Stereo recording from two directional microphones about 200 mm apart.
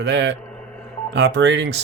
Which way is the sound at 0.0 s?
60° right (ahead or behind).